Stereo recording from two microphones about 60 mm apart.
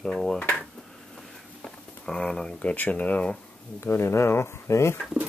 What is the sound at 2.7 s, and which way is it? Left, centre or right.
Speech, left.